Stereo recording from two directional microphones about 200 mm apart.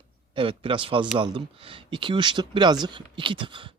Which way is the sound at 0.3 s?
25° right (ahead or behind).